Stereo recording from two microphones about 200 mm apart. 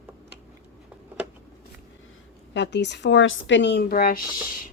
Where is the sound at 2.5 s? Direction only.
60° left (ahead or behind); by 4.2 s 45° left (ahead or behind).